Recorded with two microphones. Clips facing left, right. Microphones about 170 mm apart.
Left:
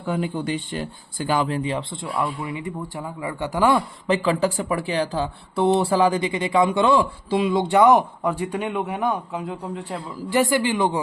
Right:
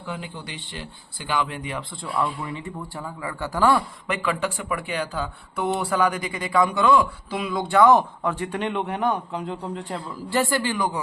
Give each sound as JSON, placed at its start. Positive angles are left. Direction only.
{"t": 0.0, "sound": "speech", "side_deg": 50}
{"t": 4.0, "sound": "speech", "side_deg": 30}
{"t": 10.2, "sound": "speech", "side_deg": 15}